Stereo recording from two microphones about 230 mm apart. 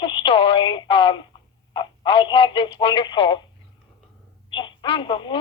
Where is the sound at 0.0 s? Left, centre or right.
Centre.